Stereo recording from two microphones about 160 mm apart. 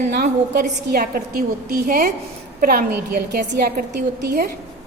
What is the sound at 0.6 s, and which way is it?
A woman's voice, 60° right (ahead or behind).